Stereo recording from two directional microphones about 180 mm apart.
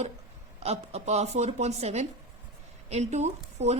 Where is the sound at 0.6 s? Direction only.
35° right (ahead or behind).